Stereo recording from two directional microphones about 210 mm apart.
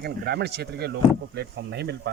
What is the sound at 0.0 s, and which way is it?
Speech, 50° right (ahead or behind).